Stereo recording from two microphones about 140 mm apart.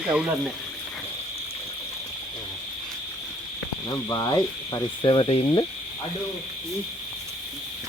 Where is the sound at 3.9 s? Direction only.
25° left (ahead or behind).